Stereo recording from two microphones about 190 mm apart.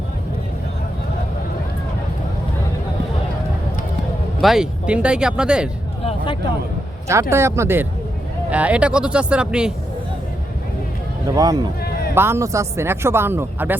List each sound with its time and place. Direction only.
4.4 s speech: centre (ahead or behind)
6.1 s speech: 25° left (ahead or behind)
7.1 s speech: 15° right (ahead or behind)
11.3 s speech: 20° right (ahead or behind)